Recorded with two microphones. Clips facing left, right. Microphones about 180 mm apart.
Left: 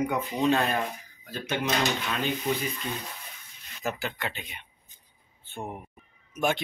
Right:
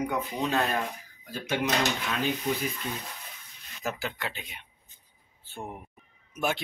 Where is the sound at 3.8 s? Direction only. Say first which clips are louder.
Left 1 dB; centre (ahead or behind).